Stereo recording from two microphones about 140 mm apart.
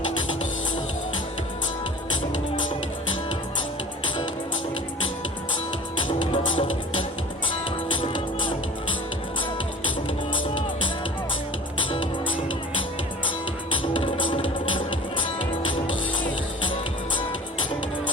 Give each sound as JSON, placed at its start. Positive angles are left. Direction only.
{"t": 6.0, "sound": "music", "side_deg": 35}
{"t": 8.0, "sound": "music", "side_deg": 35}
{"t": 11.8, "sound": "music", "side_deg": 40}
{"t": 13.9, "sound": "music", "side_deg": 40}